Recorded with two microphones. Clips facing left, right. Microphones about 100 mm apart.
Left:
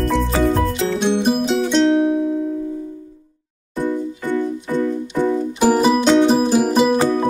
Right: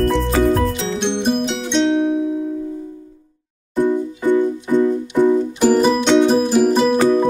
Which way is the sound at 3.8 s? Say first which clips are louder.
Right 4 dB; 15° right (ahead or behind).